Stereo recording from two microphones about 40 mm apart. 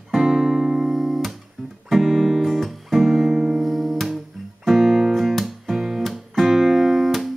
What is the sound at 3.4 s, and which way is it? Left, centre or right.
Music, centre.